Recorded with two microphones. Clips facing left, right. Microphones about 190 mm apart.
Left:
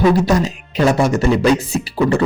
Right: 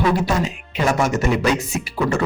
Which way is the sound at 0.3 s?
40° left (ahead or behind).